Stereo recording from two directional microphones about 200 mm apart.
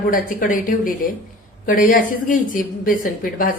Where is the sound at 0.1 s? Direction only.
45° left (ahead or behind).